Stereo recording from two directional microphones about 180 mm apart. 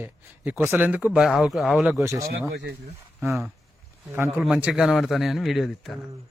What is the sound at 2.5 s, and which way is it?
Speech, 80° right.